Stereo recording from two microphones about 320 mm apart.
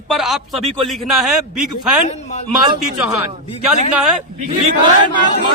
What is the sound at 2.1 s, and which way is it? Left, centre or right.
Speech, left.